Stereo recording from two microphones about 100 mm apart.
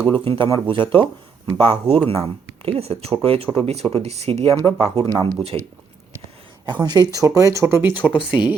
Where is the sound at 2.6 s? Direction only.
80° right.